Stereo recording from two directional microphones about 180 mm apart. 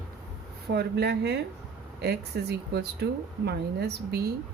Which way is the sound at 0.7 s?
65° right (ahead or behind).